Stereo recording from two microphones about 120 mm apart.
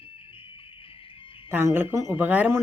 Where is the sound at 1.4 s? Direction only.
20° right (ahead or behind).